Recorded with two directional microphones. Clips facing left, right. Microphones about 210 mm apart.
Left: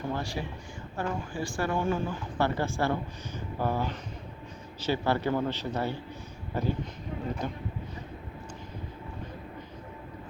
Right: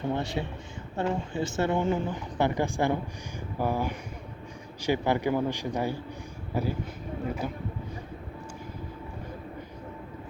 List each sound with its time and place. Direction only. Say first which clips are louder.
0.0 s a man's voice: right 3 dB; 20° right (ahead or behind)